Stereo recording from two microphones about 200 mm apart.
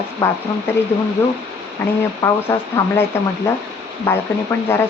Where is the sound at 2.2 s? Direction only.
15° left (ahead or behind).